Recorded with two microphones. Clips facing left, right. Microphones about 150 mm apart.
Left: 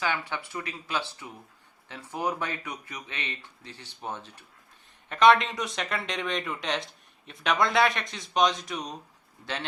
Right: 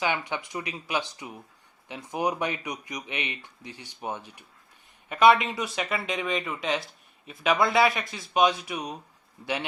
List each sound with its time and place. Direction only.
0.0 s speech: 15° right (ahead or behind)